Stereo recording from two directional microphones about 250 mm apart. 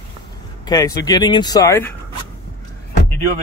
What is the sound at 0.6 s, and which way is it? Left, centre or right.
Speech, centre.